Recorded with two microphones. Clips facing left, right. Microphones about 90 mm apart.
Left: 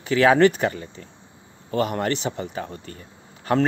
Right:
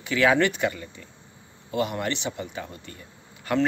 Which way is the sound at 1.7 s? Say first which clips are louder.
Left 4 dB; 45° left (ahead or behind).